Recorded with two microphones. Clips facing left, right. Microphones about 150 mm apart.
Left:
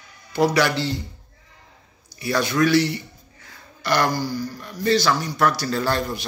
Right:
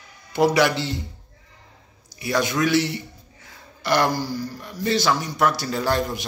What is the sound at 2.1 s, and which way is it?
Speech, 20° right (ahead or behind).